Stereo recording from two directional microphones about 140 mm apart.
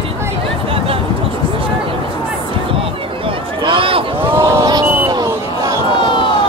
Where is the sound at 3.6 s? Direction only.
35° right (ahead or behind).